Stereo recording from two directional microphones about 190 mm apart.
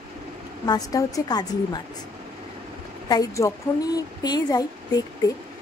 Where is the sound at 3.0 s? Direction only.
20° left (ahead or behind).